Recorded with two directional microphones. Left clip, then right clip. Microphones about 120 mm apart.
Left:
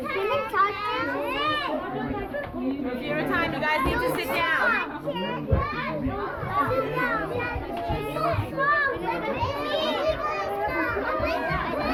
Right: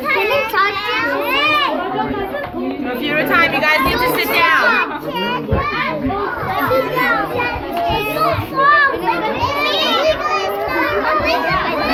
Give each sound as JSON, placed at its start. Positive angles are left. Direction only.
{"t": 3.2, "sound": "a sound", "side_deg": 30}
{"t": 6.7, "sound": "children playing", "side_deg": -20}
{"t": 8.2, "sound": "children playing", "side_deg": 0}
{"t": 10.0, "sound": "children playing", "side_deg": 20}